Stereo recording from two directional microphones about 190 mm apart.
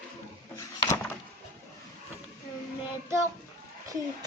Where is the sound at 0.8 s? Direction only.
15° left (ahead or behind).